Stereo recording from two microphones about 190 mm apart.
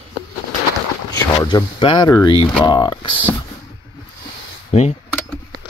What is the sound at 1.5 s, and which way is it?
Speech, 25° left (ahead or behind).